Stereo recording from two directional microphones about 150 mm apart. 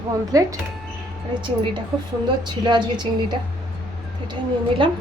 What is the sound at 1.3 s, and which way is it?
A woman's voice, 35° right (ahead or behind).